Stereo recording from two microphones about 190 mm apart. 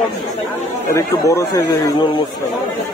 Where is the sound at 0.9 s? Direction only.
15° left (ahead or behind).